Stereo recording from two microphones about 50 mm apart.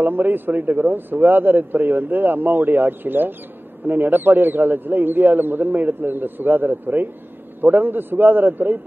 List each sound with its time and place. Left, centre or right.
0.0 s a man's voice: right